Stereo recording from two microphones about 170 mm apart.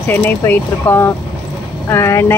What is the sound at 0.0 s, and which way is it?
Speech, 10° left (ahead or behind).